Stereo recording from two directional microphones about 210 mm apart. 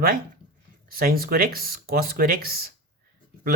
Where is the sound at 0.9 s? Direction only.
45° right (ahead or behind).